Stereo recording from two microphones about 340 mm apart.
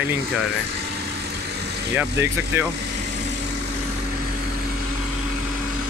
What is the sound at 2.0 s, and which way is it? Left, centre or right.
Speech, centre.